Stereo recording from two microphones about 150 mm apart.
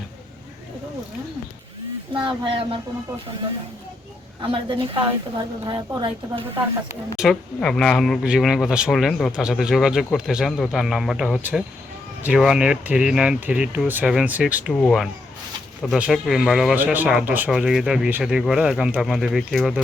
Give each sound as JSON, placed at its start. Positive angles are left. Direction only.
{"t": 2.1, "sound": "a woman's voice", "side_deg": -35}
{"t": 4.4, "sound": "a woman's voice", "side_deg": -35}
{"t": 7.2, "sound": "speech", "side_deg": 5}
{"t": 14.7, "sound": "speech", "side_deg": 0}